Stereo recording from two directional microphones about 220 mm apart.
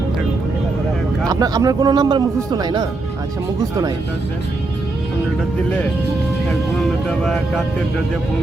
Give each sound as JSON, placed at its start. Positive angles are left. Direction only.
{"t": 1.3, "sound": "speech", "side_deg": -15}